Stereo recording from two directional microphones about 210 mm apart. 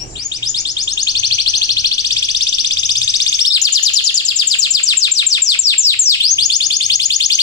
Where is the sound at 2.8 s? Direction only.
15° left (ahead or behind).